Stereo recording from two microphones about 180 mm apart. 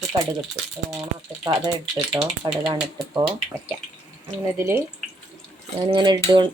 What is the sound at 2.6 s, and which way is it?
Speech, 20° right (ahead or behind).